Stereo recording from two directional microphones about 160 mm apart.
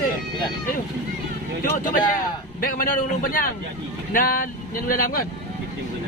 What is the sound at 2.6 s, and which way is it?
Speech, 60° left (ahead or behind).